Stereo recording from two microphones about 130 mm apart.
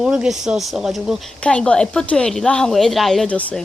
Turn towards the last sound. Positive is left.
turn(degrees=5)  # may be behind; listen again after turning